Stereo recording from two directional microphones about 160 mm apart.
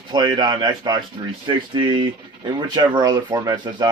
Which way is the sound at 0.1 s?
25° right (ahead or behind).